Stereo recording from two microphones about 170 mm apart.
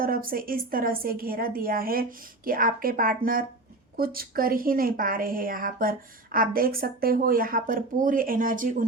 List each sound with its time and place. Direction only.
0.0 s a woman's voice: 55° right (ahead or behind)